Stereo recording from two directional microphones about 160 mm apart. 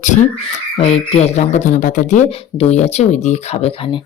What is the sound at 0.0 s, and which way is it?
Speech, 50° left (ahead or behind).